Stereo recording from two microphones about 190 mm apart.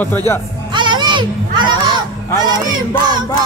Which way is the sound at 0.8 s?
25° right (ahead or behind).